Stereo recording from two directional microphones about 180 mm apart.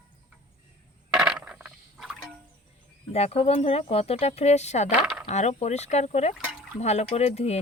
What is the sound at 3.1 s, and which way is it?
Speech, 35° left (ahead or behind).